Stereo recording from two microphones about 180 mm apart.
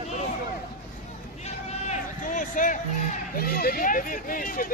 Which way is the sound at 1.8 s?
45° left (ahead or behind).